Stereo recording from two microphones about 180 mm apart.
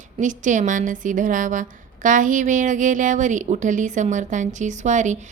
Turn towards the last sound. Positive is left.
turn(degrees=-40)  # may be behind; listen again after turning